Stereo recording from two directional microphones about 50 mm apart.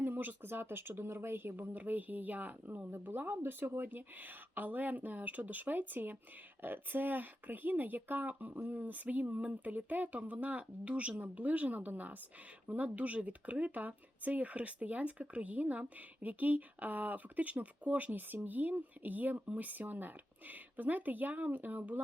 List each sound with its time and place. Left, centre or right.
0.0 s speech: right
1.7 s speech: right
3.8 s speech: right